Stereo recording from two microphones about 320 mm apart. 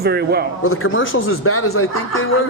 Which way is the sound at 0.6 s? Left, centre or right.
Left.